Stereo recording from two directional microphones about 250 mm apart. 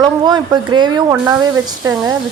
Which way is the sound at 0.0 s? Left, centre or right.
Centre.